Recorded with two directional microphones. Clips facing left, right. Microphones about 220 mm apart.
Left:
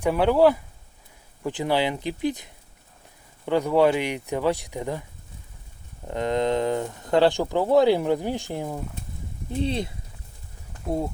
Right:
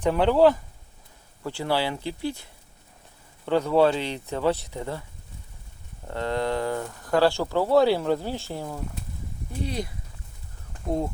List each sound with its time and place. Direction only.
0.0 s speech: 10° left (ahead or behind)
6.1 s speech: 15° left (ahead or behind)
10.8 s speech: 5° left (ahead or behind)